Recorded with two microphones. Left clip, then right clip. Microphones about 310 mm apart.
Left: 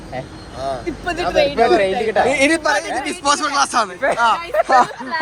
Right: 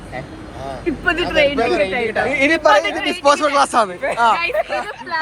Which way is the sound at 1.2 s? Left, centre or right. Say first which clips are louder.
Left 4 dB; left.